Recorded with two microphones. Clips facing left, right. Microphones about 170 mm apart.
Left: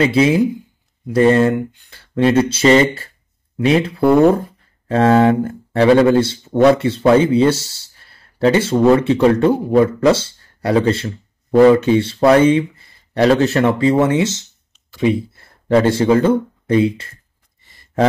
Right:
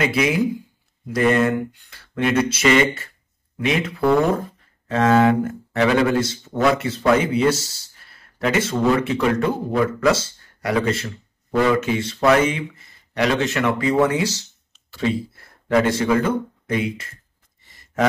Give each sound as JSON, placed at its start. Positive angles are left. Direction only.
{"t": 0.0, "sound": "speech", "side_deg": 30}